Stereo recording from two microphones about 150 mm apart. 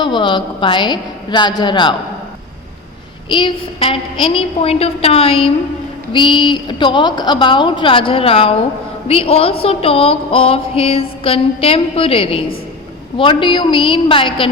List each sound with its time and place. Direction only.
0.0 s music: 35° left (ahead or behind)
3.2 s music: 35° left (ahead or behind)